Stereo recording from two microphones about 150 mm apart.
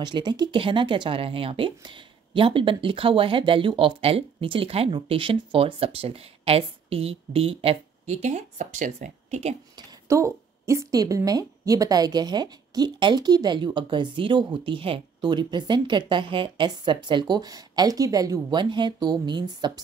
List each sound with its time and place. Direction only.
0.0 s speech: 30° right (ahead or behind); by 9.6 s 50° right (ahead or behind)
10.0 s a woman's voice: 20° right (ahead or behind)